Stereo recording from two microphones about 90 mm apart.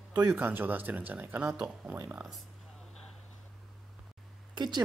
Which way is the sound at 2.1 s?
10° right (ahead or behind).